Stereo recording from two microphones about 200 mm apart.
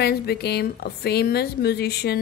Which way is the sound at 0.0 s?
55° left (ahead or behind).